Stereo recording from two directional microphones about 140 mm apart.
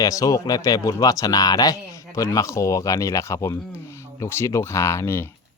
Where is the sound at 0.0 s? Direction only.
25° left (ahead or behind).